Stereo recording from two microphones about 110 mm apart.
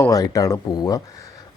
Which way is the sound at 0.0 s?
35° left (ahead or behind).